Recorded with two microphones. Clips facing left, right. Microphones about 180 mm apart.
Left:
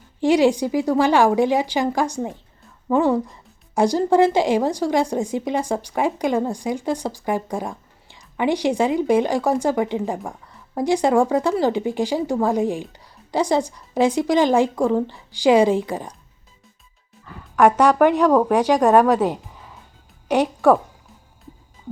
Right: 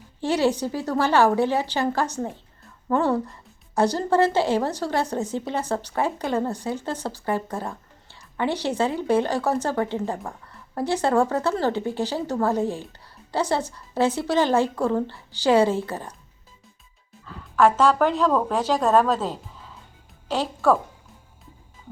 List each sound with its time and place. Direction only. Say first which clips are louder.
0.2 s a woman's voice: left 6 dB; 15° left (ahead or behind)
17.6 s a woman's voice: left 4 dB; 15° left (ahead or behind)